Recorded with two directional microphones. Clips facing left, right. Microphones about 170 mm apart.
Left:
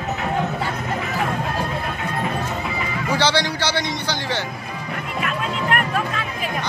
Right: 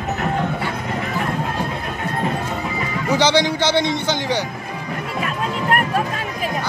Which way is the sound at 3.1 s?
20° right (ahead or behind).